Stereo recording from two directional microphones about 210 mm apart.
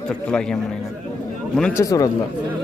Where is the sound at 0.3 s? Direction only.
5° left (ahead or behind).